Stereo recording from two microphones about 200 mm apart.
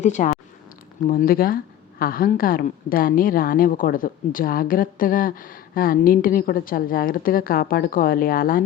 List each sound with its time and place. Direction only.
0.0 s speech: 35° left (ahead or behind)